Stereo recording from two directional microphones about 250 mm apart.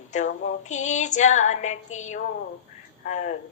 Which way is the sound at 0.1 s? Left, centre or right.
Left.